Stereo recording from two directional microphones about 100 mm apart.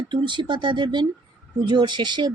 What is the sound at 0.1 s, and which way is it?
Speech, 50° right (ahead or behind).